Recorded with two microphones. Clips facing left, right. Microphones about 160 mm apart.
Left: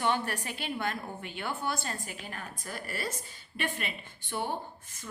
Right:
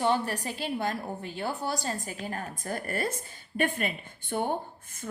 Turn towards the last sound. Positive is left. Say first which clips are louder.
# right 4 dB
turn(degrees=-50)  # may be behind; listen again after turning